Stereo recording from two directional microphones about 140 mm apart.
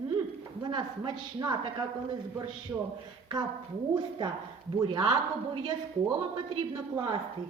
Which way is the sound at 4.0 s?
30° right (ahead or behind).